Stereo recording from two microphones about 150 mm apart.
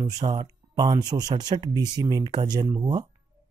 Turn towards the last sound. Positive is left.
turn(degrees=-25)  # may be behind; listen again after turning